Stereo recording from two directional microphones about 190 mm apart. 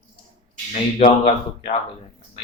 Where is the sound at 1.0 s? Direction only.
30° left (ahead or behind).